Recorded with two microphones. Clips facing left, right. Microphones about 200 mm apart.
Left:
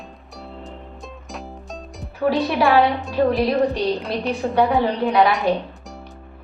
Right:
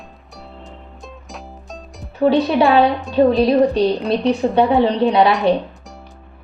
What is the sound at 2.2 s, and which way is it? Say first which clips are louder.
A woman's voice: right 5 dB; 25° right (ahead or behind).